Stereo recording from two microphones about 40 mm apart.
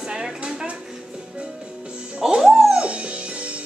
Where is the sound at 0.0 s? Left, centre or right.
Centre.